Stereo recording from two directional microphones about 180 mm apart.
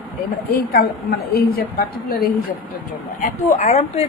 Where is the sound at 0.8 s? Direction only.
60° left (ahead or behind).